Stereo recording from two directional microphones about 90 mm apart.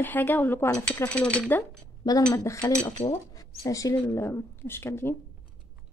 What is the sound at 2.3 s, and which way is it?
Speech, 40° left (ahead or behind).